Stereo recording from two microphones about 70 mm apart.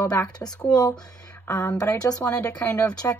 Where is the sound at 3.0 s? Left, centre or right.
Left.